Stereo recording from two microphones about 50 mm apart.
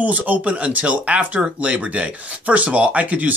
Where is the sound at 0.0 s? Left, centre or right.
Right.